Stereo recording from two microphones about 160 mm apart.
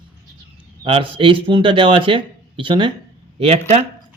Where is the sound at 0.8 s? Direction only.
35° right (ahead or behind).